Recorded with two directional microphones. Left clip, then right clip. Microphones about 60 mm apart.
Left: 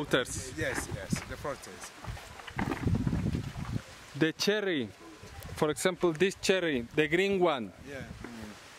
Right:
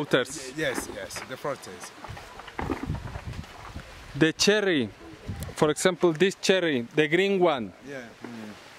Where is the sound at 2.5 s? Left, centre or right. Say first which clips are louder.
Right 3 dB; left.